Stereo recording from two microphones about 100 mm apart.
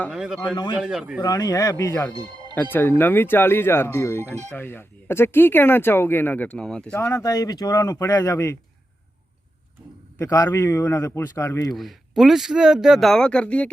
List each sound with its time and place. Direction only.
0.1 s speech: 5° right (ahead or behind)
0.5 s a man's voice: 45° left (ahead or behind)
0.8 s speech: 5° right (ahead or behind)
1.2 s speech: 40° left (ahead or behind)
1.7 s speech: 25° left (ahead or behind)
2.1 s music: 45° right (ahead or behind)
2.6 s speech: 20° left (ahead or behind)
7.0 s speech: 35° left (ahead or behind)
10.2 s speech: 25° left (ahead or behind)
11.7 s speech: centre (ahead or behind)